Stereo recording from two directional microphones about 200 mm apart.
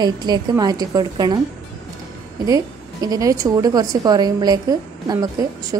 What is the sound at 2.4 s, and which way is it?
A woman's voice, 20° right (ahead or behind).